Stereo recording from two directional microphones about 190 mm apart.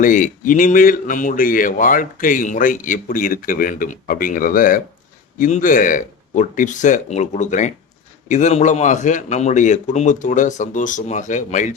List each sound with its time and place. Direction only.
0.0 s speech: 45° left (ahead or behind)